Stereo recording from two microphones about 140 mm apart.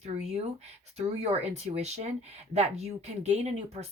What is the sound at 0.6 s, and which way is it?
Speech, 50° right (ahead or behind).